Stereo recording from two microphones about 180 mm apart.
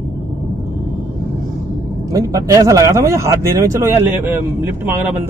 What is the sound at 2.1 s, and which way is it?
Speech, 20° right (ahead or behind).